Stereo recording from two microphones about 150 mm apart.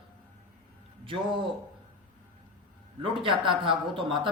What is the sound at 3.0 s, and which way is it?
Speech, 35° right (ahead or behind).